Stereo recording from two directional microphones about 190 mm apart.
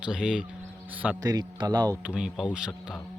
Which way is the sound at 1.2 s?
20° right (ahead or behind).